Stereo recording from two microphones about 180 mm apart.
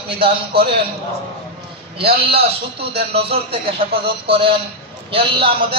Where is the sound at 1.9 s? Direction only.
30° right (ahead or behind).